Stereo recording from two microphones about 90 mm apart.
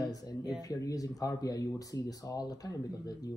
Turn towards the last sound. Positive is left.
turn(degrees=45)  # may be behind; listen again after turning